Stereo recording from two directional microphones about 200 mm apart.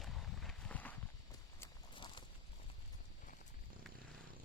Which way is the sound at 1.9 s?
25° left (ahead or behind).